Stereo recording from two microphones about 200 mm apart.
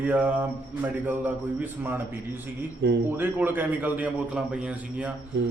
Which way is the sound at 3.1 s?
10° right (ahead or behind).